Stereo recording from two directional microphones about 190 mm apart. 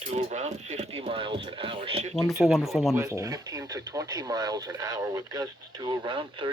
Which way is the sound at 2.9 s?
15° right (ahead or behind).